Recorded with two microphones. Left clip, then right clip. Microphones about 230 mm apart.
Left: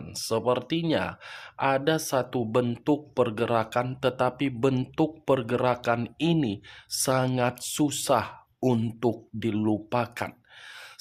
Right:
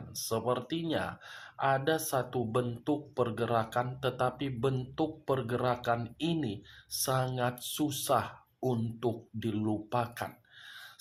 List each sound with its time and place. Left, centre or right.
0.1 s speech: left